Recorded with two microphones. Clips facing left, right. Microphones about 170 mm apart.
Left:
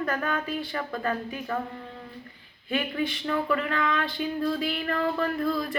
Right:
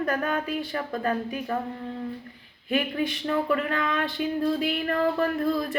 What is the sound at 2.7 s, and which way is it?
Speech, 40° right (ahead or behind).